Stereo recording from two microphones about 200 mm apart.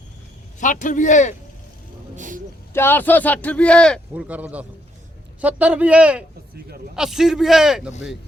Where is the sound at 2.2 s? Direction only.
40° right (ahead or behind).